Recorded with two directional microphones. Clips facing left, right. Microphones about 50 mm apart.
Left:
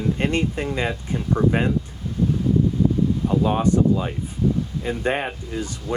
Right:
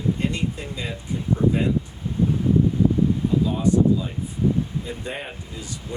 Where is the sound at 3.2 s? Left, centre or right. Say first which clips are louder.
Left 2 dB; left.